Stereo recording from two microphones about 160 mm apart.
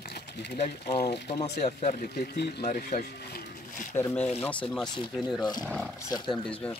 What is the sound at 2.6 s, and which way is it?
Speech, 60° left (ahead or behind).